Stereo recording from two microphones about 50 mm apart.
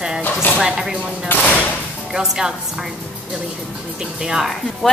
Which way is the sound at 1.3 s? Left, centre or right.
Left.